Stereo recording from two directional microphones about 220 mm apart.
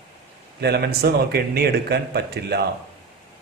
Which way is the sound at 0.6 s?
45° right (ahead or behind).